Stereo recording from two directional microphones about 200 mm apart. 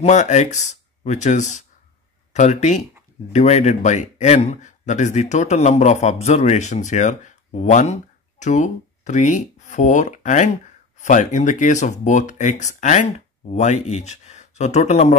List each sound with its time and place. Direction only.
0.0 s a man's voice: 35° left (ahead or behind)